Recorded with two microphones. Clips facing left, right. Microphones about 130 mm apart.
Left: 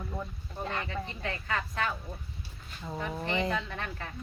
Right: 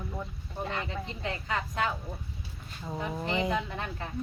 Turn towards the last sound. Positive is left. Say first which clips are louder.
# right 2 dB
turn(degrees=-20)  # may be behind; listen again after turning